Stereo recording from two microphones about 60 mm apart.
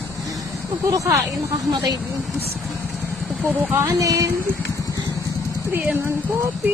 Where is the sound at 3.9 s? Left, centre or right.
Right.